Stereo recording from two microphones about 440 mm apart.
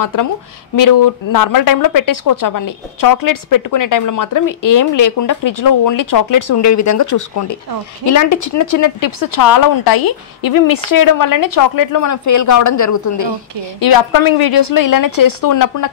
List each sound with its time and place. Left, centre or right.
0.0 s speech: left
13.7 s speech: left